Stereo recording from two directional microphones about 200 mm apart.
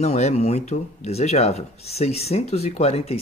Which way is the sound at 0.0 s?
35° left (ahead or behind).